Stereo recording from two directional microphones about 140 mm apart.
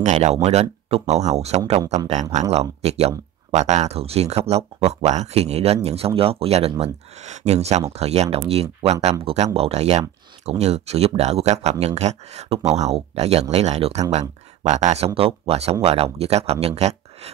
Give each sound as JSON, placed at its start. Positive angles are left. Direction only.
{"t": 0.0, "sound": "speech", "side_deg": -55}
{"t": 15.1, "sound": "speech", "side_deg": -45}